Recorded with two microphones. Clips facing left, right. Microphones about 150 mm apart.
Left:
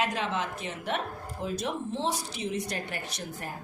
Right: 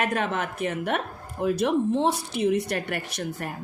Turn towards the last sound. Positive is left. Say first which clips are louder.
# right 6 dB
turn(degrees=-65)  # may be behind; listen again after turning